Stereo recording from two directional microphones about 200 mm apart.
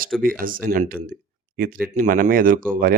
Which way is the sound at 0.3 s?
45° right (ahead or behind).